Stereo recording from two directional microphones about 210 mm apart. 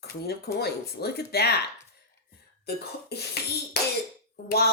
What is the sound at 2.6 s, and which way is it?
Speech, 50° left (ahead or behind).